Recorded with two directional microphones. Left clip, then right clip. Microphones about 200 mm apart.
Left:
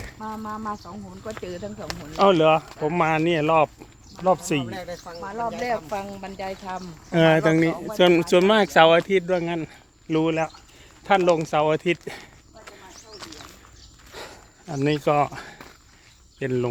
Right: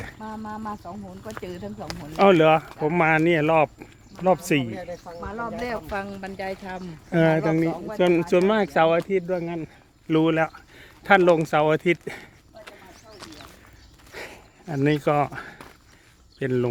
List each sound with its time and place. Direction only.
0.2 s speech: 35° right (ahead or behind)
2.1 s speech: 20° right (ahead or behind)
5.6 s speech: 50° right (ahead or behind)
7.1 s speech: centre (ahead or behind); by 9.6 s 15° left (ahead or behind)
10.1 s speech: 20° right (ahead or behind)
13.1 s clip-clop: centre (ahead or behind)
14.1 s a sound: 10° right (ahead or behind)
14.8 s speech: 10° right (ahead or behind)